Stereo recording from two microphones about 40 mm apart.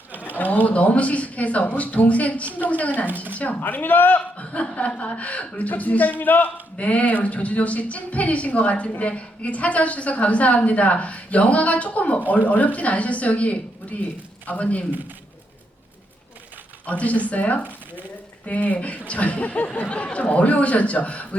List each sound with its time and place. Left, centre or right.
0.1 s pigeon: right
0.3 s sewing machine: left
0.7 s a woman's voice: left
3.6 s a man's voice: left
4.5 s a woman's voice: left
6.7 s a woman's voice: left
16.8 s a woman's voice: left
19.9 s a woman's voice: left